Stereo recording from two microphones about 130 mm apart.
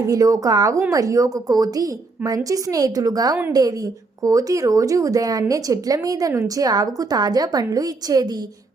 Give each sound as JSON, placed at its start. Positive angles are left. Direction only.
{"t": 0.0, "sound": "speech", "side_deg": -25}